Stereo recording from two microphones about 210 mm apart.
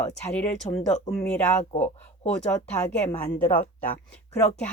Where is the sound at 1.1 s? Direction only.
5° left (ahead or behind).